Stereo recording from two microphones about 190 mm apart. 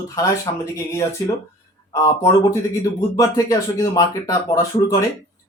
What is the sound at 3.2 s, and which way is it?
A man's voice, 20° left (ahead or behind).